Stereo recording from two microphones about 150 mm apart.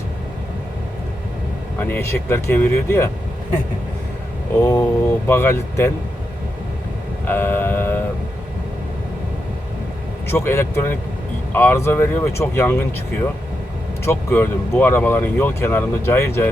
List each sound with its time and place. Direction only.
1.8 s speech: 15° left (ahead or behind)
4.6 s speech: 15° left (ahead or behind)
7.3 s a sound: 15° left (ahead or behind)
10.2 s speech: 15° left (ahead or behind)
14.0 s speech: 15° left (ahead or behind)